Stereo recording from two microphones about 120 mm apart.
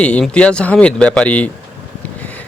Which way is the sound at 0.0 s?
10° left (ahead or behind).